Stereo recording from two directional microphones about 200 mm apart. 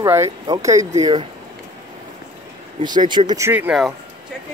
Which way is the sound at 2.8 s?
20° right (ahead or behind).